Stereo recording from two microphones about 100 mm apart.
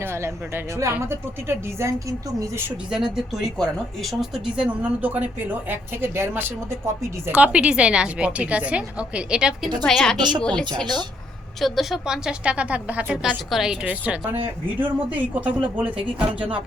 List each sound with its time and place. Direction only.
0.0 s speech: 25° right (ahead or behind)
2.9 s speech: 5° right (ahead or behind); by 7.3 s 25° right (ahead or behind)
7.3 s speech: 10° right (ahead or behind)
9.8 s a woman's voice: 5° left (ahead or behind)
10.2 s a woman's voice: 45° right (ahead or behind)
10.4 s speech: 10° left (ahead or behind); by 15.9 s 15° right (ahead or behind)